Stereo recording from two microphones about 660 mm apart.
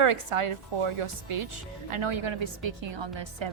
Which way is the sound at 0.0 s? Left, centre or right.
Right.